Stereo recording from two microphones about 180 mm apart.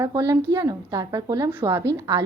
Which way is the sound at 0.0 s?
20° right (ahead or behind).